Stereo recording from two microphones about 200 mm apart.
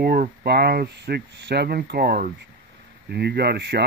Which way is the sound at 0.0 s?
50° right (ahead or behind).